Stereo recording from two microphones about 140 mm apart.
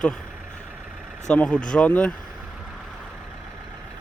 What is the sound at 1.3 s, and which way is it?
Speech, 10° left (ahead or behind).